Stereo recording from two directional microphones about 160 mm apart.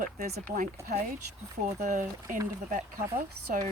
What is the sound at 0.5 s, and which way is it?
Speech, 55° right (ahead or behind).